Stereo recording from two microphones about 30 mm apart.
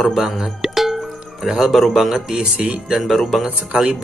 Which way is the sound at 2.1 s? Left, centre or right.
Right.